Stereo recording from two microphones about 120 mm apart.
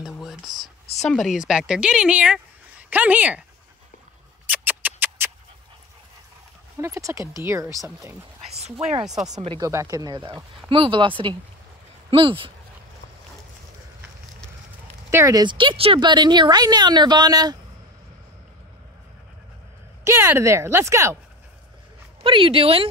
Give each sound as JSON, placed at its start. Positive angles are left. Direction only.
{"t": 0.2, "sound": "a sound", "side_deg": 0}
{"t": 1.1, "sound": "speech", "side_deg": -5}
{"t": 4.5, "sound": "a sound", "side_deg": -15}
{"t": 6.8, "sound": "speech", "side_deg": -25}
{"t": 8.5, "sound": "speech", "side_deg": -55}
{"t": 9.6, "sound": "speech", "side_deg": -25}
{"t": 10.2, "sound": "speech", "side_deg": -45}
{"t": 15.0, "sound": "speech", "side_deg": -25}
{"t": 15.4, "sound": "speech", "side_deg": -45}
{"t": 20.0, "sound": "speech", "side_deg": -20}
{"t": 22.2, "sound": "speech", "side_deg": -45}